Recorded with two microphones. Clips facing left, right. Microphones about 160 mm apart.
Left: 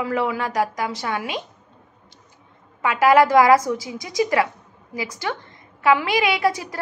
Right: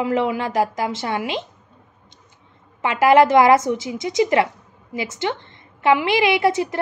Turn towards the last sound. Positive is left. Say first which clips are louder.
# right 4 dB
turn(degrees=-25)  # may be behind; listen again after turning